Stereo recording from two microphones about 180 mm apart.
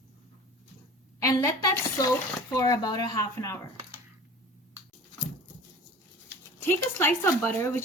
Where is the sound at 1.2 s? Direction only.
20° left (ahead or behind).